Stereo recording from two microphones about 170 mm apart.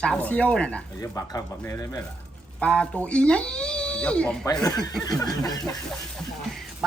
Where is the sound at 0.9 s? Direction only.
20° left (ahead or behind).